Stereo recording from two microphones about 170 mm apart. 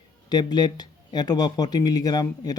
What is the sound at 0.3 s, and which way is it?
Speech, 25° left (ahead or behind).